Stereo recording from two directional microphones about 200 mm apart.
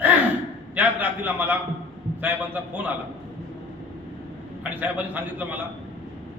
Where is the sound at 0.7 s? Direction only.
10° right (ahead or behind).